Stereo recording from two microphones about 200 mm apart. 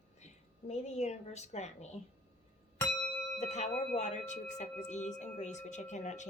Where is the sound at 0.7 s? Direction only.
35° left (ahead or behind).